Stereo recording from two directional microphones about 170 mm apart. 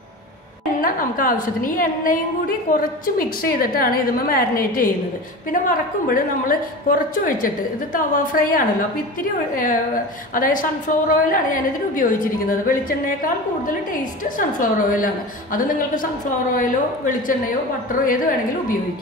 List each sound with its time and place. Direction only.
0.7 s a woman's voice: 55° left (ahead or behind)